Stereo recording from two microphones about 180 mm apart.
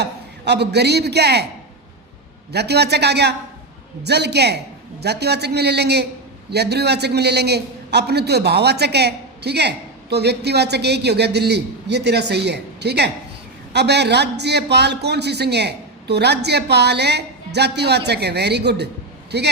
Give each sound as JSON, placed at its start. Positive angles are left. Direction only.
{"t": 0.0, "sound": "a man's voice", "side_deg": -70}
{"t": 2.5, "sound": "a man's voice", "side_deg": -65}